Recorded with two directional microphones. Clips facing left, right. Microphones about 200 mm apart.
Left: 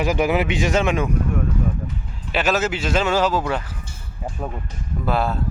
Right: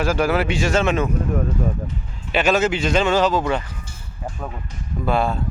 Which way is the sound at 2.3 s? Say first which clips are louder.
Right 3 dB; centre (ahead or behind).